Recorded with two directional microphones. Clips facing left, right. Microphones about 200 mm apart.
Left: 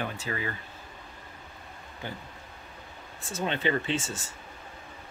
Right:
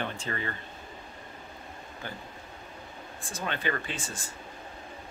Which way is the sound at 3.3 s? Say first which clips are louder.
Left 4 dB; 20° left (ahead or behind).